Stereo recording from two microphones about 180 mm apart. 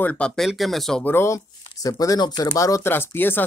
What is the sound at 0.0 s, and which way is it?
Speech, 5° left (ahead or behind).